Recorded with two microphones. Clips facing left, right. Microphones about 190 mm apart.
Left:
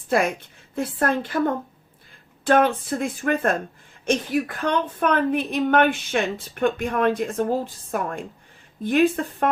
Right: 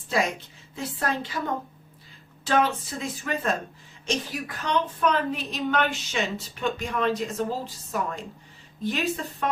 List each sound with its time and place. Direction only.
0.1 s a woman's voice: 55° left (ahead or behind)